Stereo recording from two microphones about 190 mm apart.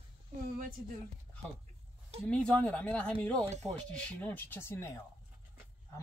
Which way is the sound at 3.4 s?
35° right (ahead or behind).